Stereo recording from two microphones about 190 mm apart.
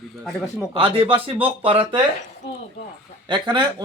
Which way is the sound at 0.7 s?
25° right (ahead or behind).